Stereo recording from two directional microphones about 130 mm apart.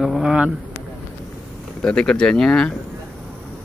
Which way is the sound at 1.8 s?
5° left (ahead or behind).